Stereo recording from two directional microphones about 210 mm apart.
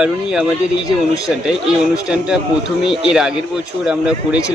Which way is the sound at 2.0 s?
5° right (ahead or behind).